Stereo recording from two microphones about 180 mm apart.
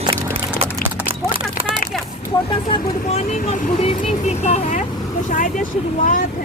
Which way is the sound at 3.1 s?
35° left (ahead or behind).